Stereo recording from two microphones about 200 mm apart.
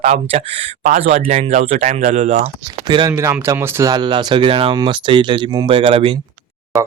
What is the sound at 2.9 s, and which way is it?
Speech, 20° right (ahead or behind).